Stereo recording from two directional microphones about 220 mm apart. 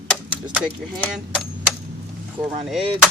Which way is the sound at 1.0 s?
5° left (ahead or behind).